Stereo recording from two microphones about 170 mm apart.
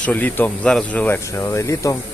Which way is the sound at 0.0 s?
10° left (ahead or behind).